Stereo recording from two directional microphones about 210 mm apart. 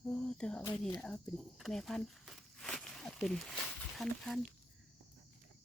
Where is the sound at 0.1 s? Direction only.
5° left (ahead or behind).